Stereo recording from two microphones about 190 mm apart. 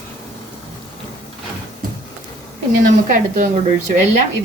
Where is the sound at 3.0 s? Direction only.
45° right (ahead or behind).